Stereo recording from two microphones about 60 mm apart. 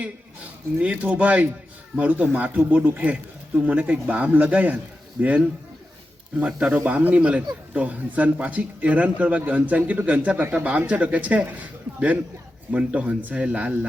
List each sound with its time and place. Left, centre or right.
0.8 s speech: right
6.3 s speech: centre